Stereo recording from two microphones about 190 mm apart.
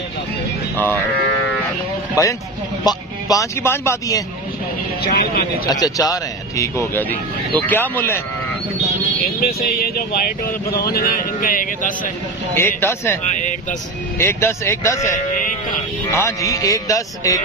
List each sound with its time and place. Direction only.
2.2 s a man's voice: 15° left (ahead or behind)
5.7 s speech: 20° left (ahead or behind)
9.4 s speech: 55° left (ahead or behind)
12.5 s speech: 15° left (ahead or behind)